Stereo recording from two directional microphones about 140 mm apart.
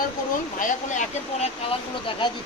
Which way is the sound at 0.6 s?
60° left (ahead or behind).